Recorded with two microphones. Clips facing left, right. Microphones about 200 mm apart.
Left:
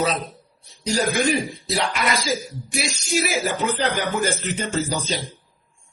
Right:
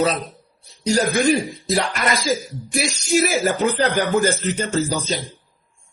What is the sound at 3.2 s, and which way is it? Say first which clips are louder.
Speech: right 5 dB; 45° right (ahead or behind).